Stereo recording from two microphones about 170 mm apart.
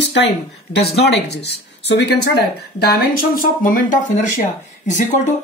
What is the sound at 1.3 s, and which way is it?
Speech, 80° left.